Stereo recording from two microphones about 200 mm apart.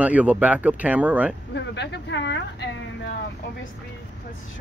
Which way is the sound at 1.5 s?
60° left (ahead or behind).